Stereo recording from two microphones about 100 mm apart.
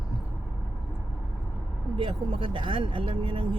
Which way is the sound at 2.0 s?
65° right (ahead or behind).